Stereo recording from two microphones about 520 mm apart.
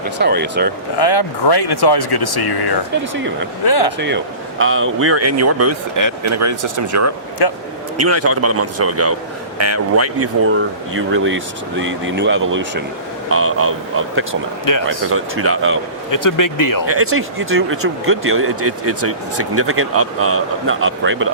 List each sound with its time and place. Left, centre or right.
0.2 s speech: centre
0.9 s speech: left
3.9 s speech: centre
7.4 s speech: left
7.9 s speech: right
14.6 s speech: left
14.8 s speech: right
16.1 s speech: left
16.8 s speech: right